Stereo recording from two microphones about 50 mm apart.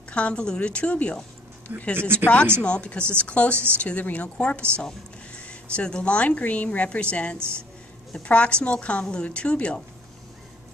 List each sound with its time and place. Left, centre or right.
0.1 s speech: left
2.0 s speech: right
2.6 s speech: left
7.3 s speech: right
8.2 s speech: left